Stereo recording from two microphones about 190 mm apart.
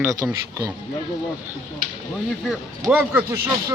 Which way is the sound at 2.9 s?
10° right (ahead or behind).